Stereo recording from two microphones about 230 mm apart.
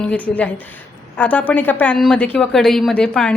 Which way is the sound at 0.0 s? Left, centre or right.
Centre.